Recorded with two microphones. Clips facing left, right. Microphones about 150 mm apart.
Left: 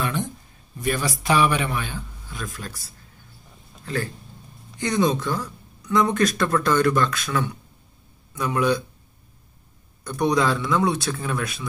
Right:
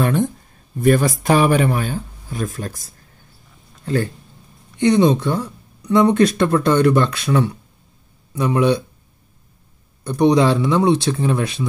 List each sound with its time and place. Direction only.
0.0 s a sound: 45° right (ahead or behind)
0.7 s speech: 50° right (ahead or behind)
3.8 s speech: 30° right (ahead or behind)
10.0 s speech: 30° right (ahead or behind)